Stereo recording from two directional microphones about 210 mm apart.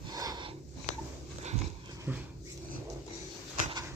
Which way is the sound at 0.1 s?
20° right (ahead or behind).